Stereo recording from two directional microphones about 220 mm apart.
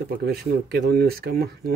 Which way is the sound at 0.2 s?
45° right (ahead or behind).